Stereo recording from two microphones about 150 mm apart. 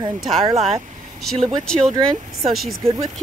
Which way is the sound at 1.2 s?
Centre (ahead or behind).